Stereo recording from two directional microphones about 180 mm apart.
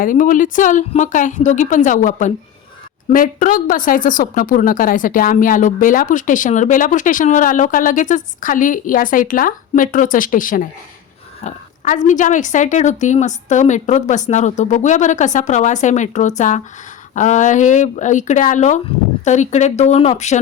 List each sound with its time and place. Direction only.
0.0 s a woman's voice: 45° left (ahead or behind)